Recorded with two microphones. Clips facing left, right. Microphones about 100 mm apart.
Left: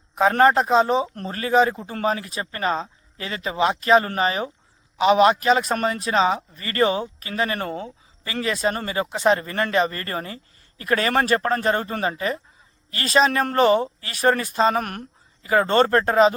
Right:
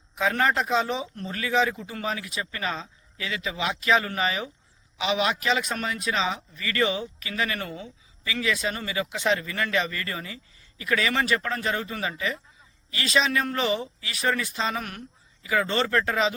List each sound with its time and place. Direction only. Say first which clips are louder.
0.2 s speech: left 7 dB; 40° left (ahead or behind)